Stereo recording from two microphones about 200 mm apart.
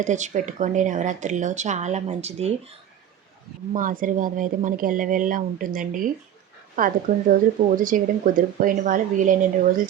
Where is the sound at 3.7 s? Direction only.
45° right (ahead or behind).